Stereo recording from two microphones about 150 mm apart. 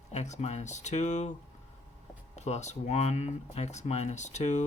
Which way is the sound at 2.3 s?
50° left (ahead or behind).